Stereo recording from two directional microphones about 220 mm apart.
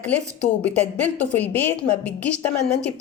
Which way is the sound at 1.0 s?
5° left (ahead or behind).